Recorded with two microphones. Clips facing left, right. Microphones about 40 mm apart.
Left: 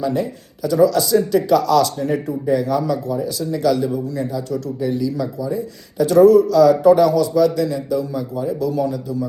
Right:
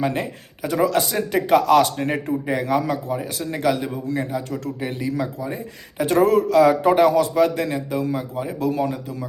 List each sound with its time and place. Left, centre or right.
0.0 s a man's voice: right